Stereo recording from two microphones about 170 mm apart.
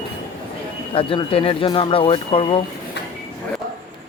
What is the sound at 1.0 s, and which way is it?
Speech, 30° left (ahead or behind).